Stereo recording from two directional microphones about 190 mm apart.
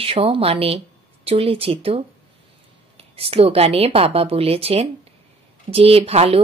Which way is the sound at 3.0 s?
30° right (ahead or behind).